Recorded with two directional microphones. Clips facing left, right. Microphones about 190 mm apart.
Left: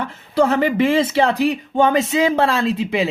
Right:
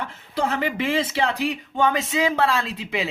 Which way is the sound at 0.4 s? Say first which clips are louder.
Left 7 dB; 40° left (ahead or behind).